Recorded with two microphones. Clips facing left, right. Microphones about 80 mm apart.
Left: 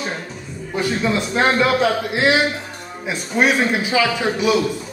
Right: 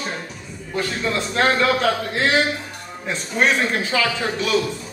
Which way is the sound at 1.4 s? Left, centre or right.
Centre.